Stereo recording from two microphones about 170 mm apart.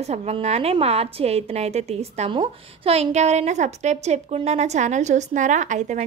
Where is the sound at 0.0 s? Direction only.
40° right (ahead or behind).